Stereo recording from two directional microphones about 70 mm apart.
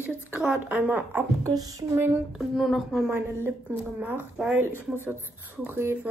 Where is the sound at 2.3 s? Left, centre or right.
Centre.